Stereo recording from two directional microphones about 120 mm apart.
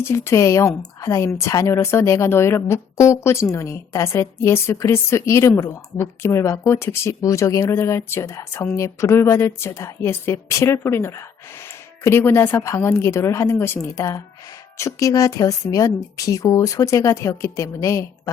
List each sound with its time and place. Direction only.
0.0 s a woman's voice: 25° left (ahead or behind)